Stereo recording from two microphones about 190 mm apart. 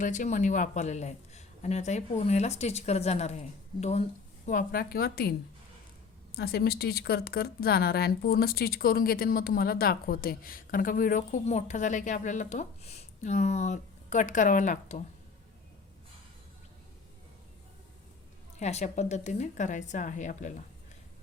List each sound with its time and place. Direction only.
0.0 s speech: 40° left (ahead or behind)
4.4 s a woman's voice: 50° left (ahead or behind)
6.3 s a woman's voice: 55° left (ahead or behind)
18.6 s speech: 35° left (ahead or behind)